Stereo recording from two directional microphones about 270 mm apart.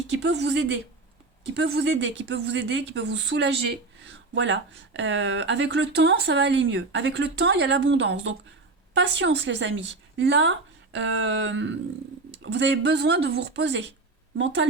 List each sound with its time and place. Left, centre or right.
0.1 s speech: right